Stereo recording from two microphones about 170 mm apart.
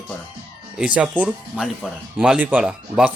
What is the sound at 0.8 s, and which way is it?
Speech, 5° right (ahead or behind).